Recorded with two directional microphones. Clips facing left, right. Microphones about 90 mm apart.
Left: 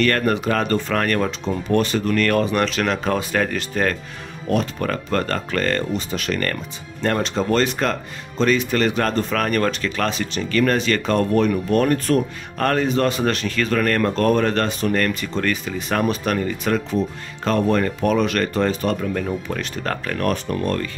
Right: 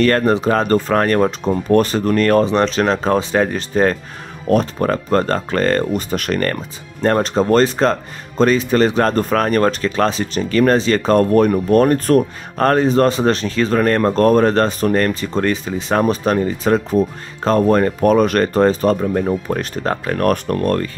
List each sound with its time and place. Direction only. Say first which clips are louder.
0.0 s speech: right 5 dB; 30° right (ahead or behind)
19.8 s speech: right 4 dB; 25° right (ahead or behind)
20.2 s speech: right 5 dB; 50° right (ahead or behind)